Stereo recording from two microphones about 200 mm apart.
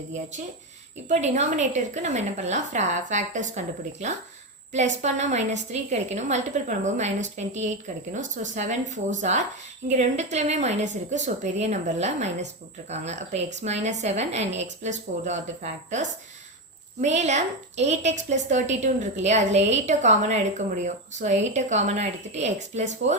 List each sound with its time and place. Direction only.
1.0 s a woman's voice: 35° right (ahead or behind)
4.7 s a woman's voice: 35° right (ahead or behind)